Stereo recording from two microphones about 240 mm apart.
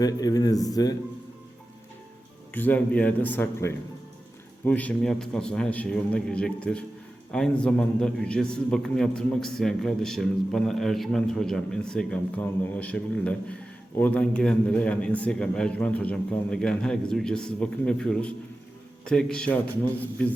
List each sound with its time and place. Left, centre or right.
0.0 s speech: centre
2.5 s a man's voice: centre